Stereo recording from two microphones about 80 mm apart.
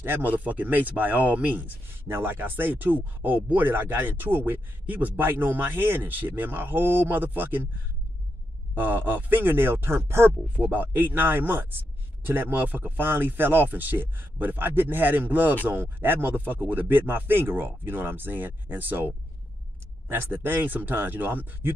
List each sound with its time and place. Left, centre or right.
0.0 s speech: right
8.7 s speech: right
10.6 s speech: right
20.1 s speech: right